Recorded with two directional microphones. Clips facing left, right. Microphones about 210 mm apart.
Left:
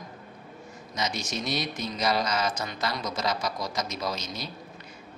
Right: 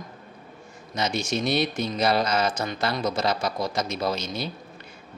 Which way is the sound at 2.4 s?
30° right (ahead or behind).